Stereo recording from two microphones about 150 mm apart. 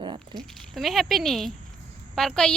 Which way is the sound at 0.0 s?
30° right (ahead or behind).